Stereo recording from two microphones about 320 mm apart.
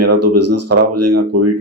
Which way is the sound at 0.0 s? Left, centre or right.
Right.